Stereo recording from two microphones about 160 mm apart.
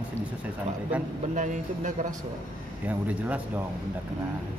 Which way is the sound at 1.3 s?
50° right (ahead or behind).